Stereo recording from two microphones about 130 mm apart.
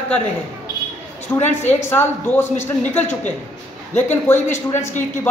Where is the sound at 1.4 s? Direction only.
60° left (ahead or behind).